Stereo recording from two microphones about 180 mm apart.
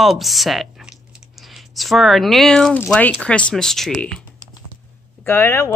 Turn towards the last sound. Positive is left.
turn(degrees=10)  # may be behind; listen again after turning